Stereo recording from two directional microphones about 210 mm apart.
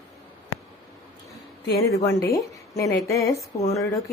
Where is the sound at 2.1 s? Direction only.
15° left (ahead or behind).